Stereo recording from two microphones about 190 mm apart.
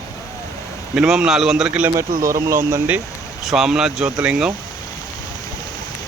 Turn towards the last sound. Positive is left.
turn(degrees=-5)  # may be behind; listen again after turning